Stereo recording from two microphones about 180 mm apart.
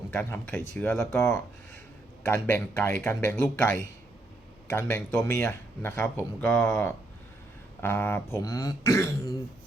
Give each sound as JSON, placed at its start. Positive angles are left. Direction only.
{"t": 0.1, "sound": "speech", "side_deg": 10}